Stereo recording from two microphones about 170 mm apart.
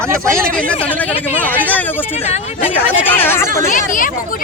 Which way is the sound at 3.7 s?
50° left (ahead or behind).